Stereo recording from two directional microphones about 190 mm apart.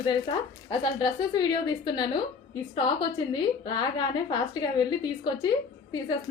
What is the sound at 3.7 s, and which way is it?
A woman's voice, 20° left (ahead or behind).